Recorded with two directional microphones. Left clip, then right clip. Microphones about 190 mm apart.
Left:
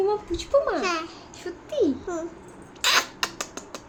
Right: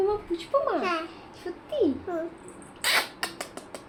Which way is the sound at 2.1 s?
15° left (ahead or behind).